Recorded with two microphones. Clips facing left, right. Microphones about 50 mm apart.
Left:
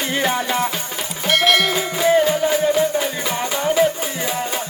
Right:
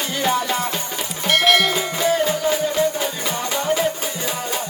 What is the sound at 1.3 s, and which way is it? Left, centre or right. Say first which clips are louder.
Music: even; centre.